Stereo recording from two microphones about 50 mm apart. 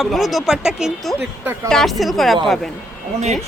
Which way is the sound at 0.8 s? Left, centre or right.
Centre.